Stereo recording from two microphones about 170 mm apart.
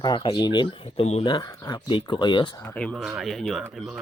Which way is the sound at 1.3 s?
25° left (ahead or behind).